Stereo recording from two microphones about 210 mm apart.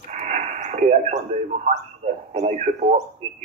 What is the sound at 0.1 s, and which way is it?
Radio, 35° right (ahead or behind).